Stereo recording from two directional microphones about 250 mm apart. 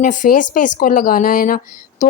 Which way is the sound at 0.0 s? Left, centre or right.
Left.